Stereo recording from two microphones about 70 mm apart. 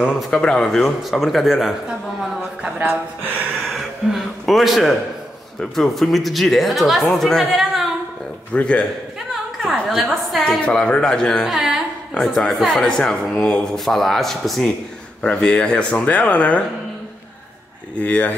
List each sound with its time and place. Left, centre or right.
0.0 s speech: centre
0.4 s speech: centre
3.6 s a sound: centre
5.6 s speech: centre
8.5 s speech: centre
9.7 s speech: centre
10.6 s speech: centre
11.4 s speech: centre
15.2 s speech: centre
18.0 s speech: left